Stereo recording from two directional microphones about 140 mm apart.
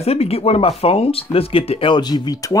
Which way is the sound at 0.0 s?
45° left (ahead or behind).